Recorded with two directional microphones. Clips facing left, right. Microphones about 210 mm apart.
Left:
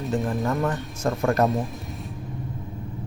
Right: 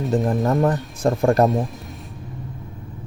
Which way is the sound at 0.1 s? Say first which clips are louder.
Right 5 dB; 40° right (ahead or behind).